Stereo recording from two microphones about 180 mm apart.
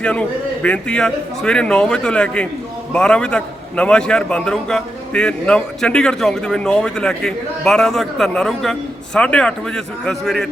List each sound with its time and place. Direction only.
0.0 s a man's voice: 5° left (ahead or behind)